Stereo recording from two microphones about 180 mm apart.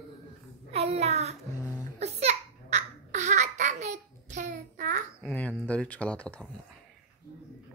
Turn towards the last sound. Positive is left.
turn(degrees=5)  # may be behind; listen again after turning